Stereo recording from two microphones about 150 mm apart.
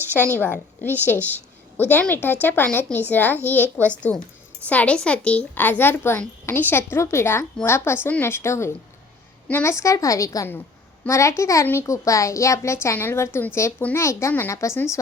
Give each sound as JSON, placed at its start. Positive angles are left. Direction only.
{"t": 0.0, "sound": "a woman's voice", "side_deg": -15}
{"t": 0.4, "sound": "a woman's voice", "side_deg": 10}